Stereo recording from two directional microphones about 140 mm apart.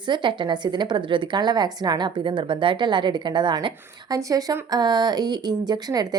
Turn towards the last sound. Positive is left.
turn(degrees=-30)  # may be behind; listen again after turning